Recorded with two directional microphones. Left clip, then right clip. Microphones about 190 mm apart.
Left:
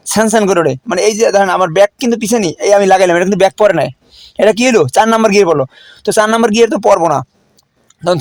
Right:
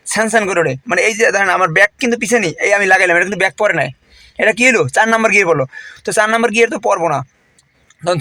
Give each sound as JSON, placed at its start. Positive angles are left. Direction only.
{"t": 0.1, "sound": "speech", "side_deg": 45}
{"t": 6.9, "sound": "speech", "side_deg": 35}